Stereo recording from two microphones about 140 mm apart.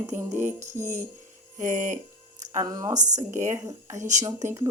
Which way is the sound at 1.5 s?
60° right (ahead or behind).